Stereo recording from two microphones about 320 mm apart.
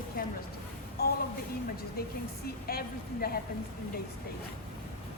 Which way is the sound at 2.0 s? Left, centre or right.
Left.